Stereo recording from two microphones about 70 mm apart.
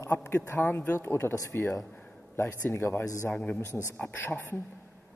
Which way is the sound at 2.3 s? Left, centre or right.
Left.